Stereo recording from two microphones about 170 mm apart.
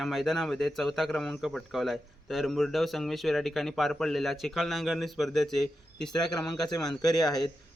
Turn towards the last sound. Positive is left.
turn(degrees=25)  # may be behind; listen again after turning